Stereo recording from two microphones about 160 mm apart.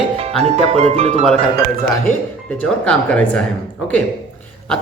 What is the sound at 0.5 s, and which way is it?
Speech, 40° right (ahead or behind).